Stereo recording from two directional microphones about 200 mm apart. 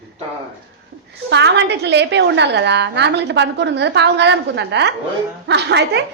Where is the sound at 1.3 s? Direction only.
60° right (ahead or behind).